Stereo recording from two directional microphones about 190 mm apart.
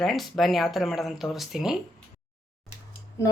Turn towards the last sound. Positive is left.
turn(degrees=15)  # may be behind; listen again after turning